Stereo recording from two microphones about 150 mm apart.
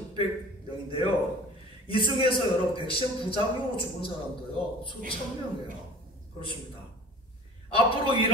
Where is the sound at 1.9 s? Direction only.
35° left (ahead or behind).